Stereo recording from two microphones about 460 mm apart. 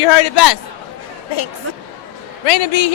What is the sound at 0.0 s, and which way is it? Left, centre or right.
Speech, left.